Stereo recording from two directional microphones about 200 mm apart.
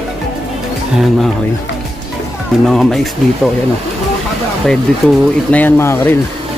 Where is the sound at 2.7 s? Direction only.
Centre (ahead or behind).